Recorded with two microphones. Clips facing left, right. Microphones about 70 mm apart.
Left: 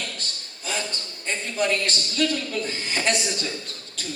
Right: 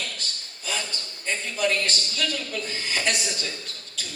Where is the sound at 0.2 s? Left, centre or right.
Left.